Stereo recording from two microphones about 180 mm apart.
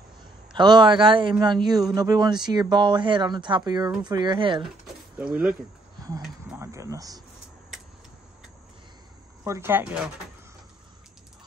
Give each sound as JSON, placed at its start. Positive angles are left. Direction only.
{"t": 0.5, "sound": "speech", "side_deg": -25}
{"t": 5.1, "sound": "speech", "side_deg": -5}
{"t": 6.5, "sound": "speech", "side_deg": -15}
{"t": 9.4, "sound": "speech", "side_deg": -15}